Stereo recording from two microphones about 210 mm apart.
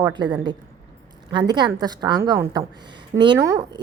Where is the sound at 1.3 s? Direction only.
20° right (ahead or behind).